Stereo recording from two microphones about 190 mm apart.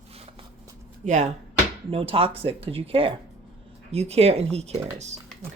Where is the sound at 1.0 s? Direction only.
40° right (ahead or behind).